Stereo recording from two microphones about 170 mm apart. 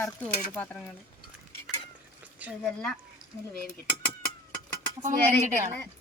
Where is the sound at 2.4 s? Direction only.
10° right (ahead or behind).